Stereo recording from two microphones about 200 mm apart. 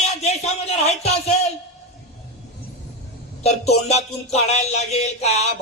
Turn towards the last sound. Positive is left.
turn(degrees=35)  # may be behind; listen again after turning